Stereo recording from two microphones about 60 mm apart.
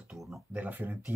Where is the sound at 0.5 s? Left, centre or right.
Right.